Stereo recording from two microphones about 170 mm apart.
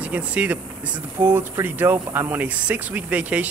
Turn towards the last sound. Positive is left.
turn(degrees=-10)  # may be behind; listen again after turning